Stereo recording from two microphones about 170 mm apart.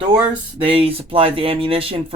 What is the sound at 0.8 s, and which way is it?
Speech, 30° right (ahead or behind).